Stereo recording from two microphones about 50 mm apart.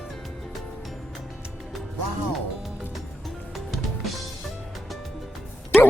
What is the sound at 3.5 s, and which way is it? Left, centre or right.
Music, centre.